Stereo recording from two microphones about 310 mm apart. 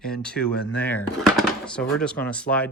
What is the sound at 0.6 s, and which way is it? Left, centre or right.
Speech, left.